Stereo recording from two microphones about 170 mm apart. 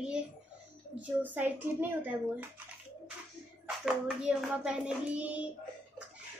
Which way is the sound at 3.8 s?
5° right (ahead or behind).